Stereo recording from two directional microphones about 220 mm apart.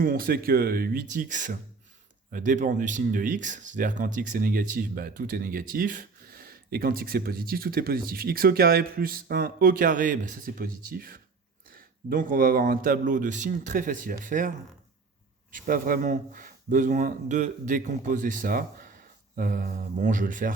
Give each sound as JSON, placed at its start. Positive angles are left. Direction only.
{"t": 0.0, "sound": "speech", "side_deg": -40}
{"t": 15.5, "sound": "speech", "side_deg": -40}